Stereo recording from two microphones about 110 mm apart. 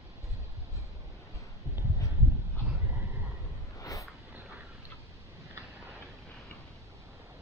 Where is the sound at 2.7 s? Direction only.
20° right (ahead or behind).